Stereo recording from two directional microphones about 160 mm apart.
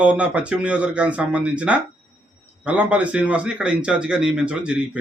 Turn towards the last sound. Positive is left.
turn(degrees=-5)  # may be behind; listen again after turning